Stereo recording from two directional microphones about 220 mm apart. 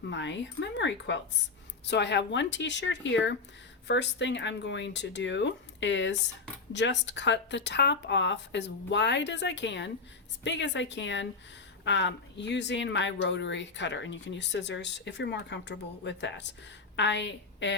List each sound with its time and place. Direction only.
0.1 s a woman's voice: 55° left (ahead or behind)